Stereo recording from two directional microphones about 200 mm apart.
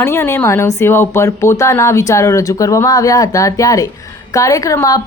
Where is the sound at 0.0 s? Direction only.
15° left (ahead or behind).